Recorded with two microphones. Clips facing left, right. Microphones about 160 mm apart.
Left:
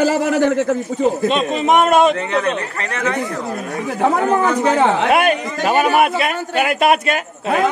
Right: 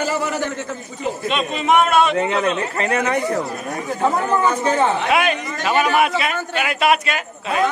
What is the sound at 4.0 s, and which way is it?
A man's voice, 90° left.